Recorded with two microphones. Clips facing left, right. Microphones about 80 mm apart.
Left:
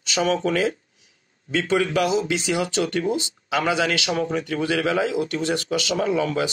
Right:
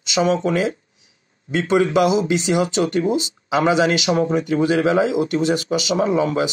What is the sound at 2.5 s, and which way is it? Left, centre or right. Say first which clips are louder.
A man's voice: right 4 dB; right.